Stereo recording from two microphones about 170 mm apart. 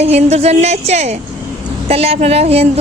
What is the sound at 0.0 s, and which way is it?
Speech, 40° right (ahead or behind).